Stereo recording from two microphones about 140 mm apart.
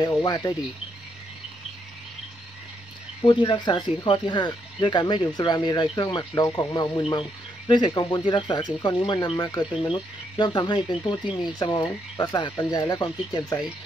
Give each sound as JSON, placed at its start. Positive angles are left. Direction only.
{"t": 0.0, "sound": "speech", "side_deg": 30}
{"t": 3.3, "sound": "speech", "side_deg": 35}